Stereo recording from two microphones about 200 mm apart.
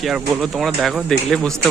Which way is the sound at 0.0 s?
Centre (ahead or behind).